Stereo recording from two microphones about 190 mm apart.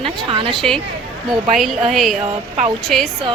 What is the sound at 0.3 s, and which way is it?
Speech, 30° right (ahead or behind).